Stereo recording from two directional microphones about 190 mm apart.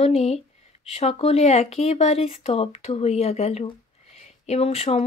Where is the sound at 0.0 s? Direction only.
35° left (ahead or behind).